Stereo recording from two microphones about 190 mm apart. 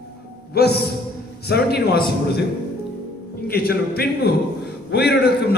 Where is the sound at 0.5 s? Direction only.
55° left (ahead or behind).